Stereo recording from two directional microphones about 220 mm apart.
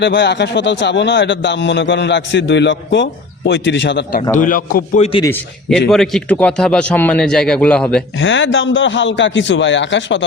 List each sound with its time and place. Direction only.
0.0 s a man's voice: 50° left (ahead or behind)
4.4 s a man's voice: 35° left (ahead or behind)
5.2 s a man's voice: 10° left (ahead or behind)
8.2 s a man's voice: 55° left (ahead or behind)